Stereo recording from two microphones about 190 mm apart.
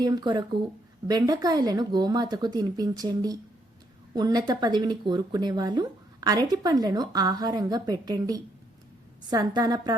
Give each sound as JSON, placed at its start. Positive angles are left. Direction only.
{"t": 0.0, "sound": "speech", "side_deg": -20}